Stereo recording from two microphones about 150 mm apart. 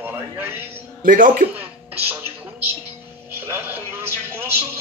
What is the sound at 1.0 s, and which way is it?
Speech, 65° right (ahead or behind).